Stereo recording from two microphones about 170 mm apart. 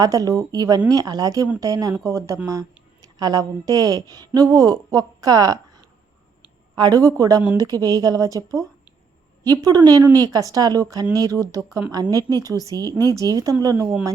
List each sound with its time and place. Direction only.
0.0 s a woman's voice: 20° right (ahead or behind)